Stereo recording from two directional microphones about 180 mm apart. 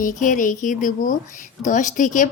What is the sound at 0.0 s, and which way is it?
A woman's voice, 45° left (ahead or behind).